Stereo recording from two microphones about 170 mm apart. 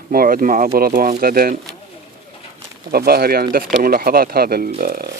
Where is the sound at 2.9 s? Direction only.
65° right (ahead or behind).